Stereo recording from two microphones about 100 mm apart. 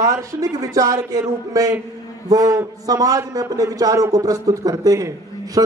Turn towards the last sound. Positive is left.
turn(degrees=-35)  # may be behind; listen again after turning